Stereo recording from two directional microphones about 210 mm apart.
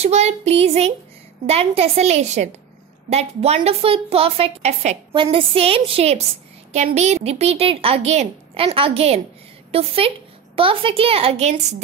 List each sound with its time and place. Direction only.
0.0 s a woman's voice: 30° right (ahead or behind)